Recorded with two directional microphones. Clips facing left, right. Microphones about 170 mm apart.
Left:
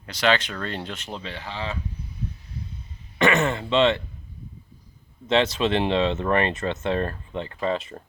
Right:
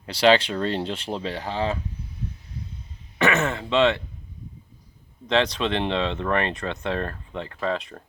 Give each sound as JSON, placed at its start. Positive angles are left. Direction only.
{"t": 0.0, "sound": "speech", "side_deg": -30}
{"t": 3.2, "sound": "speech", "side_deg": -5}
{"t": 5.2, "sound": "speech", "side_deg": 5}